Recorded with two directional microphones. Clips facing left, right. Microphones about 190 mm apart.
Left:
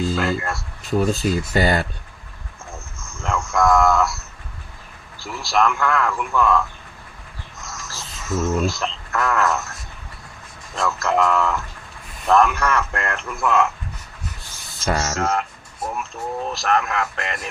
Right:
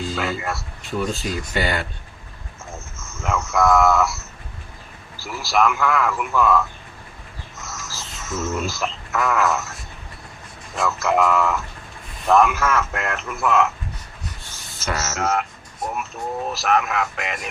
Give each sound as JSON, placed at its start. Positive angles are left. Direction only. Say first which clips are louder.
{"t": 0.2, "sound": "speech", "louder": "left 3 dB", "side_deg": 0}
{"t": 0.9, "sound": "speech", "louder": "left 5 dB", "side_deg": 40}
{"t": 3.2, "sound": "a sound", "louder": "even", "side_deg": 0}
{"t": 5.2, "sound": "speech", "louder": "even", "side_deg": -5}
{"t": 7.6, "sound": "a sound", "louder": "even", "side_deg": 0}
{"t": 8.5, "sound": "speech", "louder": "left 3 dB", "side_deg": 0}
{"t": 10.8, "sound": "a sound", "louder": "even", "side_deg": 0}
{"t": 12.3, "sound": "speech", "louder": "even", "side_deg": 0}
{"t": 15.1, "sound": "speech", "louder": "even", "side_deg": -5}